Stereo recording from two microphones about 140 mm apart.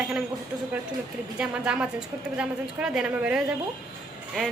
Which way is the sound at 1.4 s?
5° right (ahead or behind).